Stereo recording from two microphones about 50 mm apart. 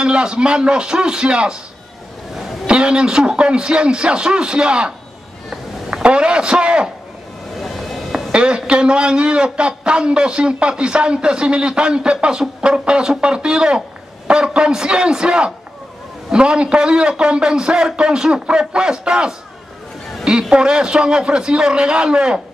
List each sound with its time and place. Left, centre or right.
0.0 s a man's voice: centre
2.6 s a man's voice: centre
7.5 s a sound: centre
8.3 s a man's voice: centre